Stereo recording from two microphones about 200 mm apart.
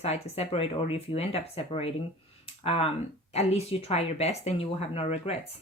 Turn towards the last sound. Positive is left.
turn(degrees=30)  # may be behind; listen again after turning